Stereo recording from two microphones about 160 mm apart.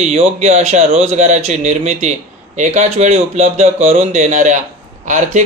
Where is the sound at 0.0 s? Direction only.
45° right (ahead or behind).